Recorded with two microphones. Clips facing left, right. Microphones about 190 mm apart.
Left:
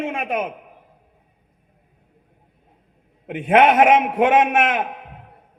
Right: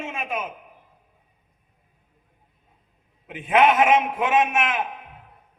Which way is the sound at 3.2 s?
60° left (ahead or behind).